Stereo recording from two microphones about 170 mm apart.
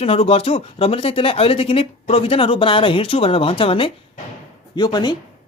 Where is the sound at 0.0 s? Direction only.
35° left (ahead or behind).